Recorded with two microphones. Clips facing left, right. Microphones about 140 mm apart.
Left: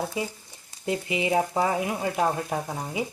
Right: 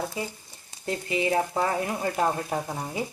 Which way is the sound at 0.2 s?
15° left (ahead or behind).